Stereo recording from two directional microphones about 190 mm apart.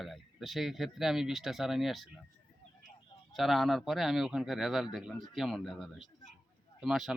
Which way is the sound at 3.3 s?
Centre (ahead or behind).